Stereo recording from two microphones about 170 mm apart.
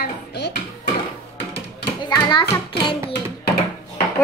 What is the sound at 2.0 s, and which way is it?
Speech, 20° left (ahead or behind).